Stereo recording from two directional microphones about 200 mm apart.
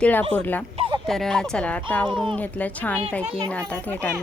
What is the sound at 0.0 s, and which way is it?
Speech, 10° left (ahead or behind).